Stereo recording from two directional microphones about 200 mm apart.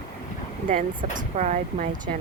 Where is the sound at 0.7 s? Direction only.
40° right (ahead or behind).